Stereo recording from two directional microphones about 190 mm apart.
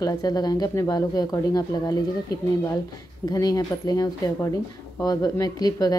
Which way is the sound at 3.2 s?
20° left (ahead or behind).